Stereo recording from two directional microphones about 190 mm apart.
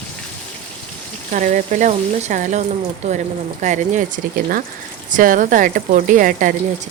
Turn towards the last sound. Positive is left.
turn(degrees=-45)  # may be behind; listen again after turning